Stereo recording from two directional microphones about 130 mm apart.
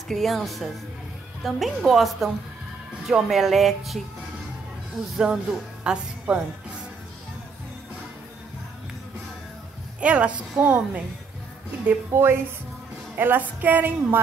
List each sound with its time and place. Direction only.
0.1 s speech: centre (ahead or behind)
5.1 s speech: centre (ahead or behind)
9.9 s a woman's voice: 10° right (ahead or behind)
12.1 s a woman's voice: 20° right (ahead or behind)